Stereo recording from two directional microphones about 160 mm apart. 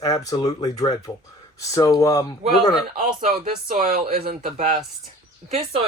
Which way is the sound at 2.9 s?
65° right (ahead or behind).